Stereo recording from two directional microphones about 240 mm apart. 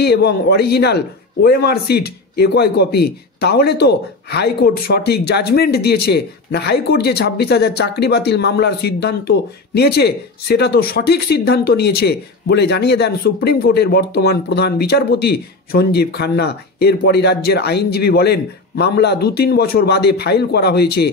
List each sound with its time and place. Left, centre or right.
0.0 s a man's voice: left